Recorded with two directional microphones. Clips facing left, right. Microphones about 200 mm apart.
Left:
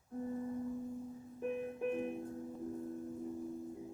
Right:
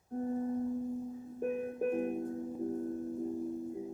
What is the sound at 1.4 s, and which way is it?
Music, 45° right (ahead or behind).